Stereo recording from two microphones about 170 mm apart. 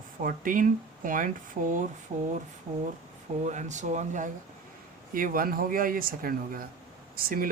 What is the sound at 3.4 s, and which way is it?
Speech, 45° right (ahead or behind).